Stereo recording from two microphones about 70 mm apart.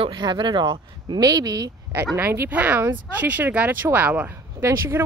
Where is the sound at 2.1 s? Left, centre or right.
Right.